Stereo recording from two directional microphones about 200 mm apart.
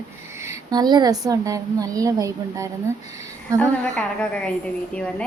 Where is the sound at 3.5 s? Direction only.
5° left (ahead or behind).